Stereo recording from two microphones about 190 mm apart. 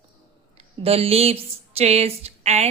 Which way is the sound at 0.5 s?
30° right (ahead or behind).